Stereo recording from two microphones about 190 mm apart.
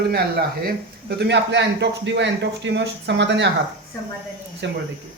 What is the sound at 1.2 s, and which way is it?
Speech, 65° right (ahead or behind).